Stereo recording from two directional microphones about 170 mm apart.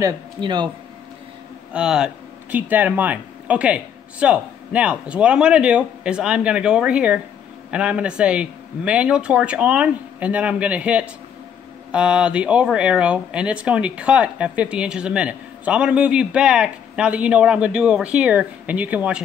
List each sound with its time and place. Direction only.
0.0 s speech: 25° right (ahead or behind)
1.7 s speech: 5° right (ahead or behind)